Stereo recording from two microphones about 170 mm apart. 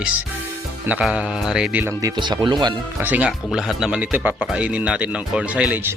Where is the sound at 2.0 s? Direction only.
25° right (ahead or behind).